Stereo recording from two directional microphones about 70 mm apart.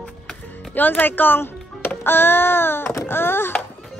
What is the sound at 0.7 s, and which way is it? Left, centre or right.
A child's voice, left.